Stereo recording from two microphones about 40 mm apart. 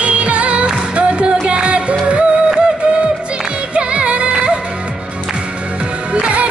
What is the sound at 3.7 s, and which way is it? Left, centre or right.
Music, right.